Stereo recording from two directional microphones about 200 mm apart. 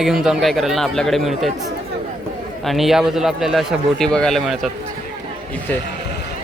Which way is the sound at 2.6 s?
Centre (ahead or behind).